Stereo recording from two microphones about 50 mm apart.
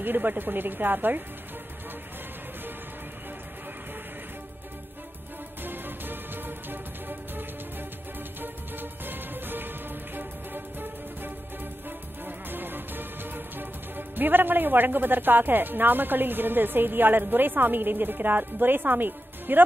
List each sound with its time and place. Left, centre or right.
0.0 s speech: right
5.6 s music: right